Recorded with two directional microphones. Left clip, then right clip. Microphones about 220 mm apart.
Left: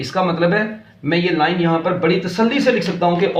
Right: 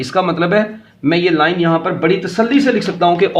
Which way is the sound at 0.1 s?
50° right (ahead or behind).